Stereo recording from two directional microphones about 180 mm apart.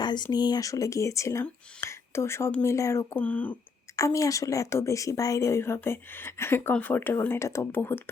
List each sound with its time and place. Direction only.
0.0 s a woman's voice: 25° left (ahead or behind)